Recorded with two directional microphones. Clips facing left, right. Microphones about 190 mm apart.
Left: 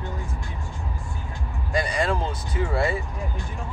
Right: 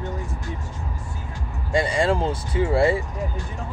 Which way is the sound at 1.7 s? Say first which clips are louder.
Right 4 dB; 25° right (ahead or behind).